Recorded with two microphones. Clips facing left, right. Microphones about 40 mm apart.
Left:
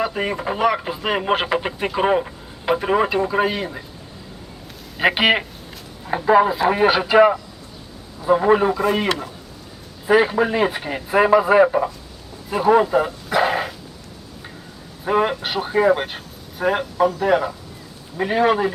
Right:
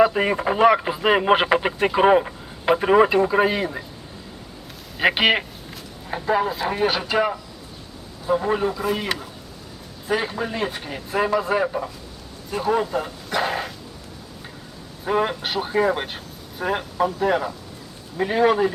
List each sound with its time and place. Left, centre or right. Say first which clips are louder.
0.0 s speech: right 4 dB; centre
4.9 s speech: left 2 dB; centre
6.1 s a man's voice: left 7 dB; centre
8.7 s speech: left 5 dB; centre
10.1 s speech: left 8 dB; centre
12.5 s dog: left 6 dB; centre
15.0 s speech: left 3 dB; centre